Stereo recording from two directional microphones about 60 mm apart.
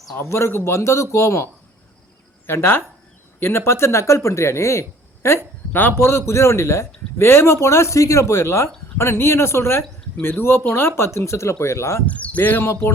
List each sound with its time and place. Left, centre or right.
0.2 s a man's voice: left
2.5 s a man's voice: left
12.0 s speech: left